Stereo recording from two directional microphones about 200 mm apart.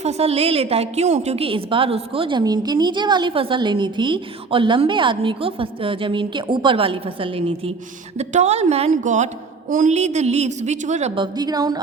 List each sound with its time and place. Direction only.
0.0 s a woman's voice: 30° right (ahead or behind)